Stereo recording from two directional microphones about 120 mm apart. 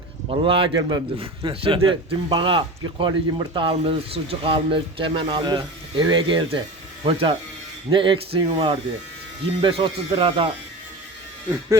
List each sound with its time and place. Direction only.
0.3 s speech: 50° right (ahead or behind)
0.8 s a man's voice: 35° right (ahead or behind)
1.4 s speech: 45° right (ahead or behind)